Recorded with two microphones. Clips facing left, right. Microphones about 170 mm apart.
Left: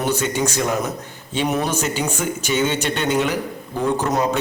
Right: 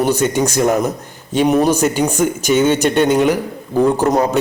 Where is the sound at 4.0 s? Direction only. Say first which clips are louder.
Right 5 dB; 40° right (ahead or behind).